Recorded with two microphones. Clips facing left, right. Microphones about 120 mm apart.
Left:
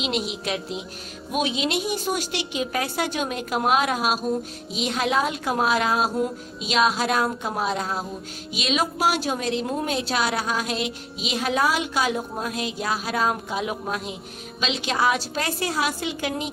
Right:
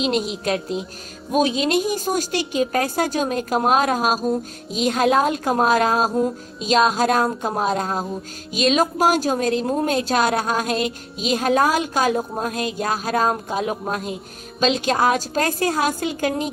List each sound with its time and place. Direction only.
0.0 s a woman's voice: 40° right (ahead or behind)